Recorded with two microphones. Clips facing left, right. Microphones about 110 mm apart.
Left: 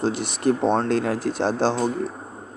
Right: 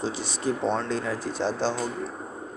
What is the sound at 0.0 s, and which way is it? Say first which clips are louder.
Speech: left 6 dB; 60° left (ahead or behind).